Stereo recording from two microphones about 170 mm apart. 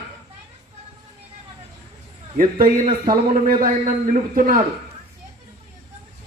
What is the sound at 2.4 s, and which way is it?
Speech, 55° right (ahead or behind).